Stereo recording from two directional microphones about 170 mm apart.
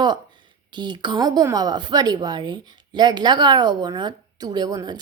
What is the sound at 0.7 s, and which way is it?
A woman's voice, 25° right (ahead or behind).